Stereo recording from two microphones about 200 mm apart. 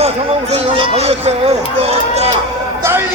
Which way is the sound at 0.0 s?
30° right (ahead or behind).